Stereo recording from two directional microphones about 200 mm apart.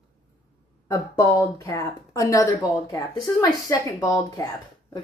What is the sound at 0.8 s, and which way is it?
A woman's voice, 15° left (ahead or behind).